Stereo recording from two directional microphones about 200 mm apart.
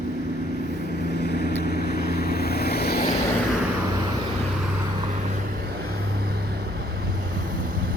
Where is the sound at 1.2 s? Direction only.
55° left (ahead or behind).